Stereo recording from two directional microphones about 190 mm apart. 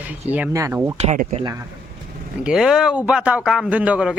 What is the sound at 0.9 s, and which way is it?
Speech, 35° right (ahead or behind).